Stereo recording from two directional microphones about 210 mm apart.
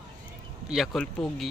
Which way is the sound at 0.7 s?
Centre (ahead or behind).